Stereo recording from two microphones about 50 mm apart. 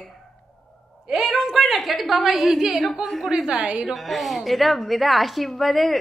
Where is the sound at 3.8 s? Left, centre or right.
Centre.